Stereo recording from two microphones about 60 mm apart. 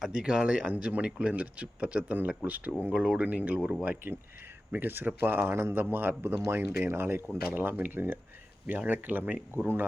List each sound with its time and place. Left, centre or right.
0.0 s speech: centre
3.8 s speech: right